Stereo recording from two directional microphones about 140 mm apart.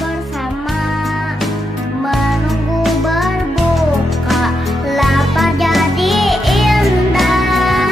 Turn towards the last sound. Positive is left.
turn(degrees=0)  # may be behind; listen again after turning